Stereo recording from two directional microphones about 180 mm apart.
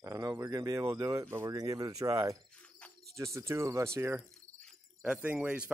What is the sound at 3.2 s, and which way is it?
Cricket, 15° right (ahead or behind).